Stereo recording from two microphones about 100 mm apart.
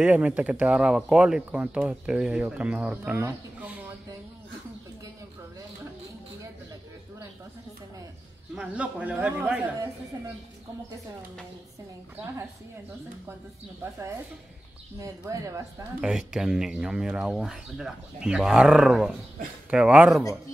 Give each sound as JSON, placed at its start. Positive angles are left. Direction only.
{"t": 0.0, "sound": "speech", "side_deg": -15}
{"t": 8.5, "sound": "speech", "side_deg": -10}
{"t": 15.0, "sound": "speech", "side_deg": -35}
{"t": 16.0, "sound": "speech", "side_deg": -5}